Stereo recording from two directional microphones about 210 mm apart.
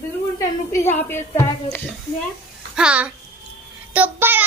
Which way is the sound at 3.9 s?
10° right (ahead or behind).